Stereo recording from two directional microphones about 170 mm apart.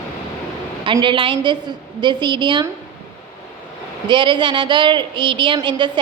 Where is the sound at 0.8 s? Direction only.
30° right (ahead or behind).